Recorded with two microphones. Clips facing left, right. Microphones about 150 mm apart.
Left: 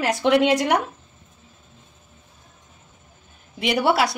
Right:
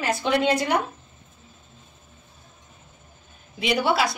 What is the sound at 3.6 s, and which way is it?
Speech, 65° left (ahead or behind).